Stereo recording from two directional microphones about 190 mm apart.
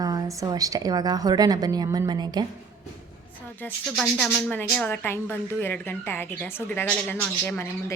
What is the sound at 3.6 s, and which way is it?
Speech, 5° left (ahead or behind).